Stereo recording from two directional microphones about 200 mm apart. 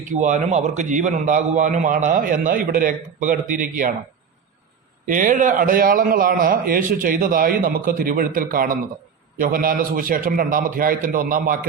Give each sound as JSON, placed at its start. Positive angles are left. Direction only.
{"t": 0.1, "sound": "a man's voice", "side_deg": -40}
{"t": 5.0, "sound": "a man's voice", "side_deg": -40}